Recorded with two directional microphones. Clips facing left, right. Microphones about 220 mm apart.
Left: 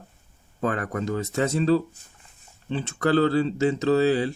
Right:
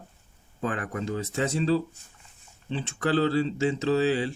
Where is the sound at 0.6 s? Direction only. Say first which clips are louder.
Left 4 dB; 45° left (ahead or behind).